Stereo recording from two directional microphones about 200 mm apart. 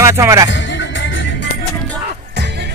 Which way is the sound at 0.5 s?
65° left (ahead or behind).